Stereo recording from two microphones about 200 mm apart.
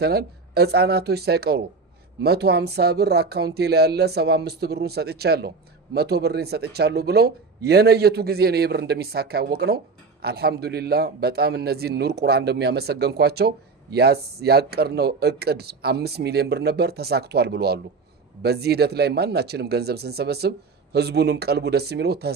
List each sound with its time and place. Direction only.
0.0 s speech: 55° right (ahead or behind)